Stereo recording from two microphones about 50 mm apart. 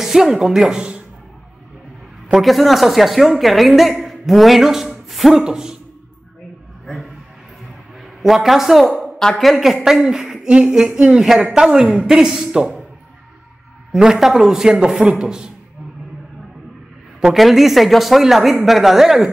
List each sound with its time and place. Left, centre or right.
0.0 s a woman's voice: centre
2.3 s a man's voice: centre
5.4 s a man's voice: centre
8.0 s a woman's voice: centre
14.0 s a man's voice: centre
17.2 s speech: centre